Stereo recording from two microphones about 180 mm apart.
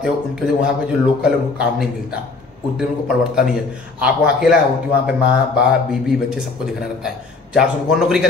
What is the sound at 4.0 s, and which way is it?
Speech, 5° right (ahead or behind).